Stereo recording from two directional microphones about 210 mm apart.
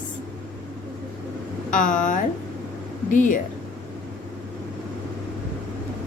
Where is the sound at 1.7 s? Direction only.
40° left (ahead or behind).